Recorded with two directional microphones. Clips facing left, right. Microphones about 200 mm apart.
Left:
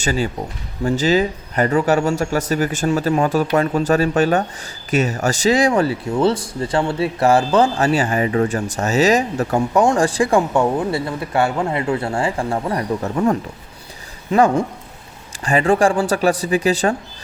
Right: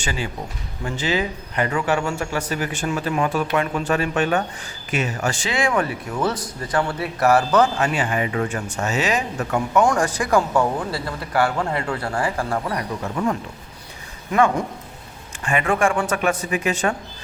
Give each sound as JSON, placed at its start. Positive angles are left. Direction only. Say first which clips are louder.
{"t": 0.0, "sound": "speech", "louder": "left 7 dB", "side_deg": 40}
{"t": 14.3, "sound": "speech", "louder": "left 4 dB", "side_deg": 35}